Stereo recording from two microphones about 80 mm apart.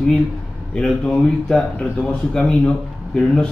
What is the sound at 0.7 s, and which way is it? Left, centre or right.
A man's voice, centre.